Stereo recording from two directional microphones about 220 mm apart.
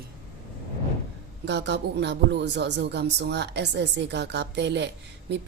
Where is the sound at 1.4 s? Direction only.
50° right (ahead or behind).